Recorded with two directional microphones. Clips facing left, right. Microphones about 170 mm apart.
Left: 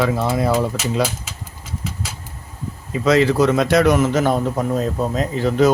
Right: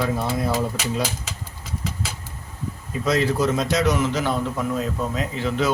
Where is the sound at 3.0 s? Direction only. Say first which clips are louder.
Left 6 dB; 90° left.